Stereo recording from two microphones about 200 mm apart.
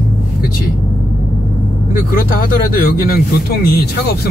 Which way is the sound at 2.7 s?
50° left (ahead or behind).